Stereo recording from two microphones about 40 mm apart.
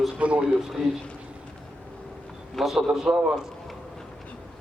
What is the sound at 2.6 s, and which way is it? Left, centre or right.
Speech, centre.